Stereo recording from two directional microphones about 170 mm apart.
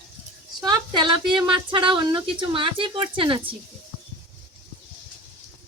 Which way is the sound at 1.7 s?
30° right (ahead or behind).